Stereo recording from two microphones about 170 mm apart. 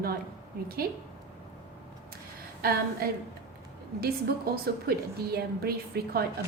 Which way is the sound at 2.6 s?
65° right (ahead or behind).